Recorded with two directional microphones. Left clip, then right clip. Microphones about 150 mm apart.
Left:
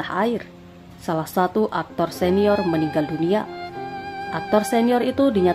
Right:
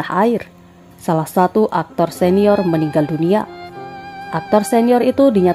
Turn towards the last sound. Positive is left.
turn(degrees=-35)  # may be behind; listen again after turning